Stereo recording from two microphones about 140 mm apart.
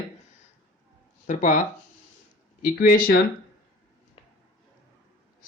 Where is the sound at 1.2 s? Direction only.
65° left (ahead or behind).